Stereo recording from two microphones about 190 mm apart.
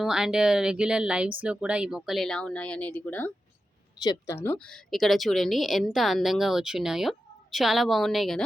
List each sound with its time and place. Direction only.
0.0 s a woman's voice: 5° right (ahead or behind)